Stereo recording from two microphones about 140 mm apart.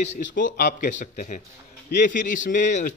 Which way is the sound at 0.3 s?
75° left (ahead or behind).